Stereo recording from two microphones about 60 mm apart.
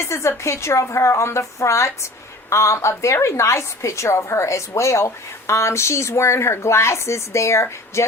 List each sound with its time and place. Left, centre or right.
0.0 s a woman's voice: left